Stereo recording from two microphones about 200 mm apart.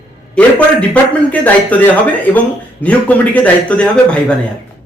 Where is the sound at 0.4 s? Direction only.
5° left (ahead or behind).